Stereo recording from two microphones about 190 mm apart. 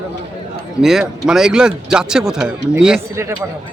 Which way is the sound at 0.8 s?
Centre (ahead or behind).